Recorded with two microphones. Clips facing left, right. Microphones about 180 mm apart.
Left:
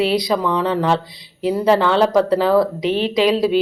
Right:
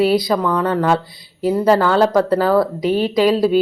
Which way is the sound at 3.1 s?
Centre (ahead or behind).